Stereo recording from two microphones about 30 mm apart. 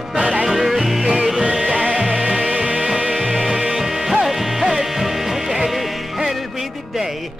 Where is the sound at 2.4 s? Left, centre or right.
Right.